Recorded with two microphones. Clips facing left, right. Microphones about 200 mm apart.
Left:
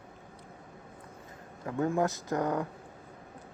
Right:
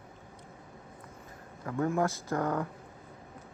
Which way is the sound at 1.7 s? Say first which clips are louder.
Left 1 dB; 20° left (ahead or behind).